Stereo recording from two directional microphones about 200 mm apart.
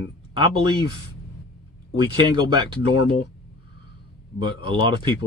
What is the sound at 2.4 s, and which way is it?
Speech, 20° right (ahead or behind).